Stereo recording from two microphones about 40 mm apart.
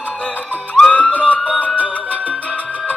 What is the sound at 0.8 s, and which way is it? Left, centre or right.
Music, left.